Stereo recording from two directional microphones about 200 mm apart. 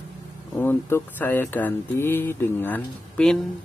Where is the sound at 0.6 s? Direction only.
10° left (ahead or behind).